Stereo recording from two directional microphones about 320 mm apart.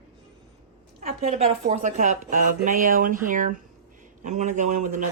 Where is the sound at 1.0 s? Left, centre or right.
Right.